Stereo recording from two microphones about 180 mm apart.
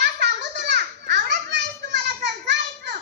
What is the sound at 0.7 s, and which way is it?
Children playing, 70° right (ahead or behind).